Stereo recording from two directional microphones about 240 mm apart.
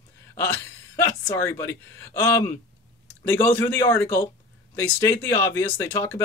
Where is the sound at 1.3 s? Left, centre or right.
Centre.